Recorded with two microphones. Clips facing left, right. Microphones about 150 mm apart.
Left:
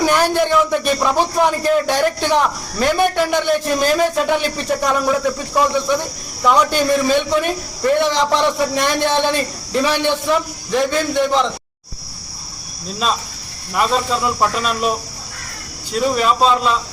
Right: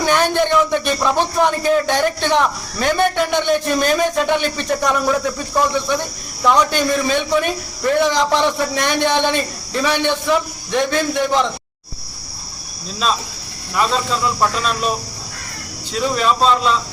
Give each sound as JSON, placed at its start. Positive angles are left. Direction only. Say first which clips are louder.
{"t": 0.0, "sound": "a man's voice", "louder": "left 1 dB", "side_deg": 10}
{"t": 13.7, "sound": "speech", "louder": "left 1 dB", "side_deg": 10}
{"t": 16.0, "sound": "speech", "louder": "left 1 dB", "side_deg": 5}